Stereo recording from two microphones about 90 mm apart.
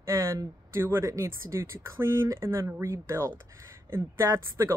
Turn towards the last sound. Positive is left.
turn(degrees=-35)  # may be behind; listen again after turning